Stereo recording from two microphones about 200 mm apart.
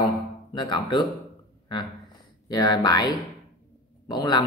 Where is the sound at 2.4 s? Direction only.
20° left (ahead or behind).